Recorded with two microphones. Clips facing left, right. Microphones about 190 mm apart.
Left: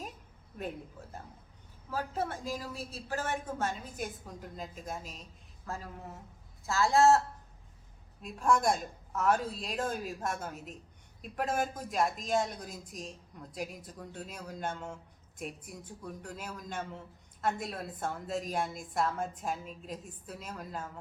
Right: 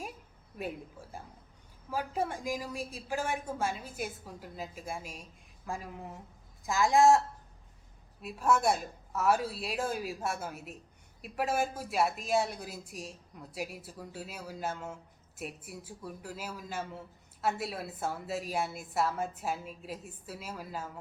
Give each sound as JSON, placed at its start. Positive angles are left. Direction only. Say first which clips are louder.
{"t": 0.6, "sound": "a woman's voice", "louder": "right 1 dB", "side_deg": -10}
{"t": 8.2, "sound": "a woman's voice", "louder": "even", "side_deg": -5}